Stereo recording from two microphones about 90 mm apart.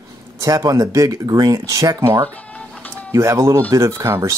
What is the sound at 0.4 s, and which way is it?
Speech, 35° right (ahead or behind).